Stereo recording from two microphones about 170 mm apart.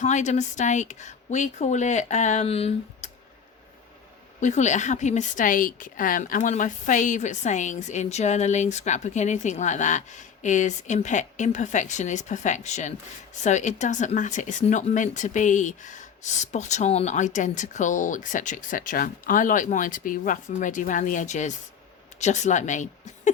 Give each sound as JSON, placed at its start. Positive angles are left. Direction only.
{"t": 0.0, "sound": "a woman's voice", "side_deg": 45}
{"t": 4.4, "sound": "a woman's voice", "side_deg": 45}